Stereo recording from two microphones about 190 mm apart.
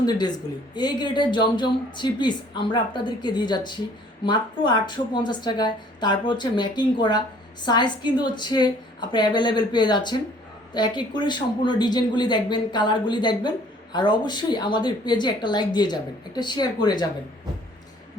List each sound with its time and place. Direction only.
0.0 s speech: 20° left (ahead or behind)